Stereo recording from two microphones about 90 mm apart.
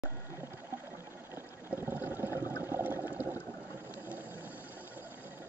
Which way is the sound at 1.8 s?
20° right (ahead or behind).